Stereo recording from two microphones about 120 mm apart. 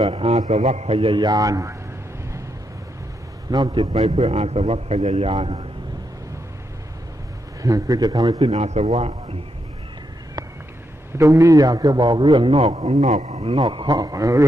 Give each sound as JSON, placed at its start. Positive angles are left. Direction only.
{"t": 0.1, "sound": "a man's voice", "side_deg": -55}
{"t": 3.5, "sound": "a man's voice", "side_deg": -35}
{"t": 4.0, "sound": "a man's voice", "side_deg": -60}
{"t": 7.6, "sound": "a man's voice", "side_deg": -30}
{"t": 8.4, "sound": "a man's voice", "side_deg": -60}
{"t": 11.3, "sound": "a man's voice", "side_deg": -30}
{"t": 13.6, "sound": "a man's voice", "side_deg": -40}